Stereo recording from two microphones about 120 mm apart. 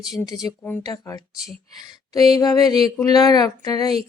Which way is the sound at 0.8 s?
30° left (ahead or behind).